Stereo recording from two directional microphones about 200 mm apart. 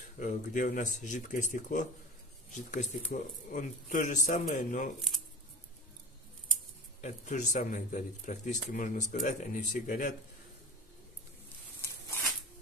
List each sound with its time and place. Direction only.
0.2 s a man's voice: 40° left (ahead or behind)
7.0 s a man's voice: 35° left (ahead or behind)